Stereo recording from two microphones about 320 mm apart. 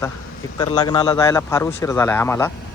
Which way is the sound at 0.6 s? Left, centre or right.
Centre.